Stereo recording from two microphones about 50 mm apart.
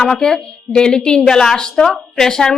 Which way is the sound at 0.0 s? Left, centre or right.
Centre.